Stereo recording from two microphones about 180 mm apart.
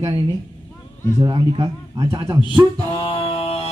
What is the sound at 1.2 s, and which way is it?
A man's voice, 25° right (ahead or behind).